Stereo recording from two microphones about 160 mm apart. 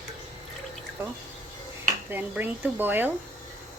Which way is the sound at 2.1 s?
10° right (ahead or behind).